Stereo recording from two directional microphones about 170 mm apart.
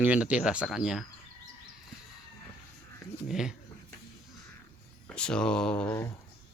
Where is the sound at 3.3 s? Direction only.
5° right (ahead or behind).